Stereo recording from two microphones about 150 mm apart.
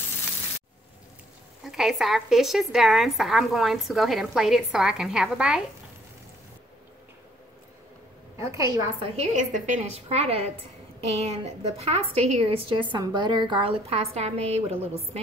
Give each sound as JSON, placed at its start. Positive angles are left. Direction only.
{"t": 1.6, "sound": "a woman's voice", "side_deg": 0}
{"t": 8.4, "sound": "a woman's voice", "side_deg": -20}
{"t": 9.1, "sound": "a woman's voice", "side_deg": -50}
{"t": 10.0, "sound": "a woman's voice", "side_deg": -40}